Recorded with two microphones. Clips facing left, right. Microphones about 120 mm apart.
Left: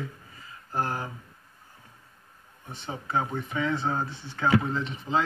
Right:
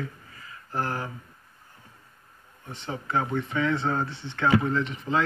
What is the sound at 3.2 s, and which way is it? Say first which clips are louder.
Speech: right 2 dB; 15° left (ahead or behind).